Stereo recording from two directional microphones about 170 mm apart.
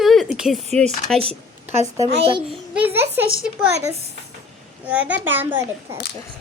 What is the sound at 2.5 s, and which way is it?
Speech, 10° right (ahead or behind).